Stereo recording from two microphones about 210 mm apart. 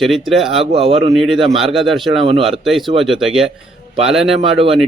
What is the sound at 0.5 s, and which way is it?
Speech, 25° right (ahead or behind).